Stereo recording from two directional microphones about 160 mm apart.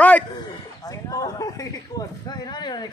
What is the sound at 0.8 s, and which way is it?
Speech, 20° left (ahead or behind).